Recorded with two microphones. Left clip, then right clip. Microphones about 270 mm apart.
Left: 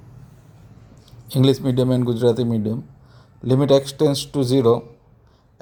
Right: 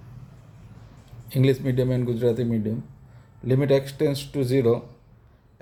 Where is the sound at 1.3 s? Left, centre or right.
Left.